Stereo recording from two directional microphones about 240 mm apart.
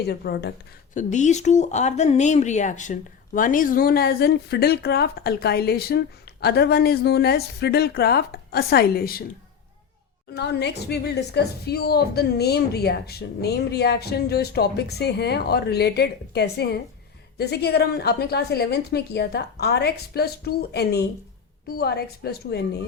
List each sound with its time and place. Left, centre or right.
0.0 s a woman's voice: left
0.9 s speech: left
10.3 s a woman's voice: left